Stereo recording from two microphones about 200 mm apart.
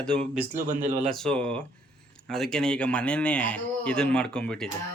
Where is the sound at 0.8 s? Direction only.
40° right (ahead or behind).